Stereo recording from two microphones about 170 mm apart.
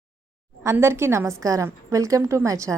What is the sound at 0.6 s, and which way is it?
A woman's voice, 15° right (ahead or behind).